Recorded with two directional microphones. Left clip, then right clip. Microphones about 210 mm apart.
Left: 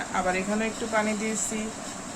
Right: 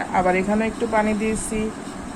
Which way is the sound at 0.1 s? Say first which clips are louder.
Right 8 dB; 15° right (ahead or behind).